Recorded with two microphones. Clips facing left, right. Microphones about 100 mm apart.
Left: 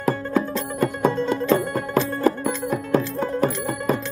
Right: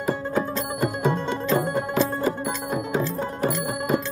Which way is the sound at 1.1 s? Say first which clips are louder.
Left 3 dB; 20° right (ahead or behind).